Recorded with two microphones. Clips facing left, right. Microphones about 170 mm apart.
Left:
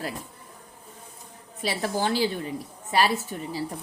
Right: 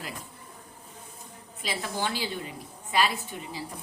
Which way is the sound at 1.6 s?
40° left (ahead or behind).